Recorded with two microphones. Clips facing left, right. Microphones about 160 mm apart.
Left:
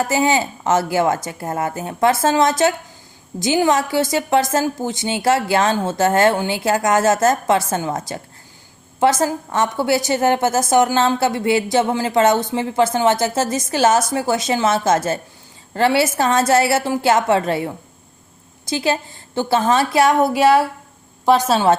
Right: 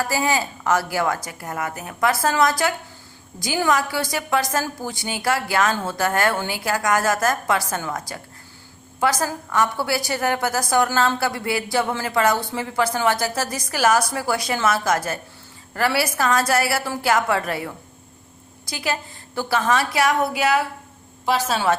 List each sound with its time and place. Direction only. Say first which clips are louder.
0.0 s a woman's voice: left 5 dB; 20° left (ahead or behind)